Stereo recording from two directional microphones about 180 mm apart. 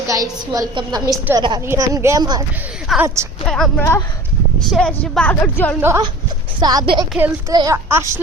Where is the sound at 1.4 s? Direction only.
25° right (ahead or behind).